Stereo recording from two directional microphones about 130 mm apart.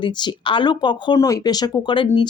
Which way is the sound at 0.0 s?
35° left (ahead or behind).